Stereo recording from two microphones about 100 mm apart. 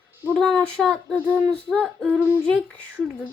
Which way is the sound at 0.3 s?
5° left (ahead or behind).